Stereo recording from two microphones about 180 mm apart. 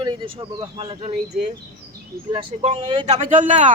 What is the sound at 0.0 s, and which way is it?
Speech, 30° right (ahead or behind).